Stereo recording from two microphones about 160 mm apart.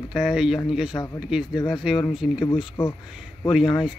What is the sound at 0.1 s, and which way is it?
Speech, 5° right (ahead or behind).